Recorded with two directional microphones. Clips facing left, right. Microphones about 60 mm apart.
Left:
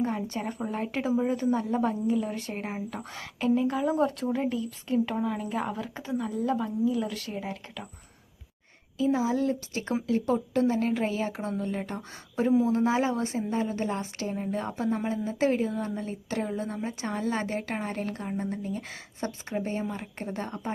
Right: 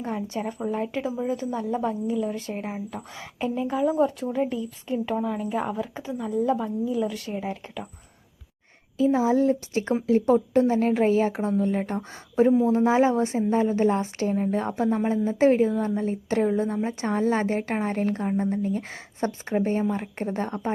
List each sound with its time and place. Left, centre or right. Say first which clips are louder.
0.0 s a woman's voice: right 1 dB; centre
9.0 s a woman's voice: right 5 dB; right
12.5 s a woman's voice: right 1 dB; centre
12.7 s a woman's voice: right 5 dB; right